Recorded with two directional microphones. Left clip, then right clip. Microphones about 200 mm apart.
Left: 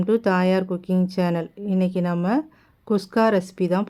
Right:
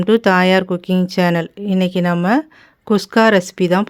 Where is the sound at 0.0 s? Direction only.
25° right (ahead or behind).